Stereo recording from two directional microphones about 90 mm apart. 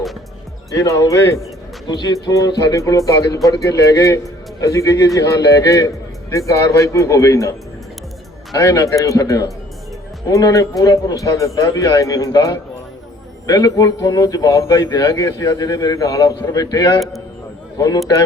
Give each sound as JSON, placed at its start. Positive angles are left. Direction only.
{"t": 0.7, "sound": "a man's voice", "side_deg": 40}
{"t": 1.9, "sound": "a man's voice", "side_deg": 50}
{"t": 2.1, "sound": "a man's voice", "side_deg": 40}
{"t": 8.5, "sound": "a man's voice", "side_deg": 35}